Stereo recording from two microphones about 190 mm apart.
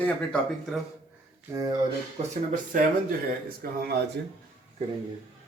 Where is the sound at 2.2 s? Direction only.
40° right (ahead or behind).